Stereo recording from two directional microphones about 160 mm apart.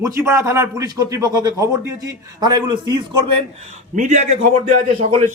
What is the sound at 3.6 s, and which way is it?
Speech, 45° right (ahead or behind).